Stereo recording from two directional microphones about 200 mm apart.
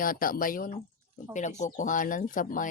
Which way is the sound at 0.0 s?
45° left (ahead or behind).